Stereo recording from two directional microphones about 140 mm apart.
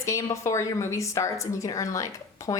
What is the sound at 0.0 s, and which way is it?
Speech, 20° left (ahead or behind).